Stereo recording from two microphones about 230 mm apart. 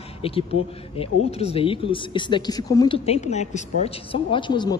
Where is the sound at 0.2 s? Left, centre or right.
Left.